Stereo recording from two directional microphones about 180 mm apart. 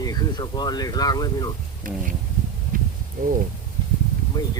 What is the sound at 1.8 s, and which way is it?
Speech, 50° right (ahead or behind).